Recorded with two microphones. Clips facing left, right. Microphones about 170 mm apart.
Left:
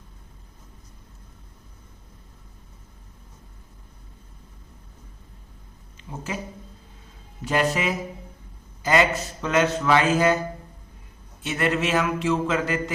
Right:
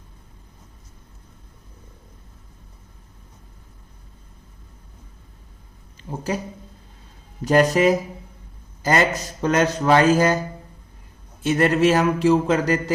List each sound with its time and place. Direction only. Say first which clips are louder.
6.0 s speech: right 6 dB; 40° right (ahead or behind)
7.4 s a man's voice: right 7 dB; 40° right (ahead or behind)
11.4 s a man's voice: right 7 dB; 40° right (ahead or behind)